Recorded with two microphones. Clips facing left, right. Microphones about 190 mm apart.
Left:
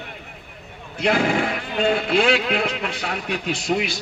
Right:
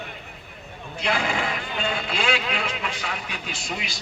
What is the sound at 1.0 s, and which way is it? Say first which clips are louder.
Speech: left 6 dB; 55° left (ahead or behind).